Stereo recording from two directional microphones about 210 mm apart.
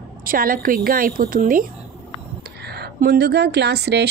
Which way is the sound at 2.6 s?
50° right (ahead or behind).